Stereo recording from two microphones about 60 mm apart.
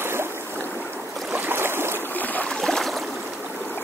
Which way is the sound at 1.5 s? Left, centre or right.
Right.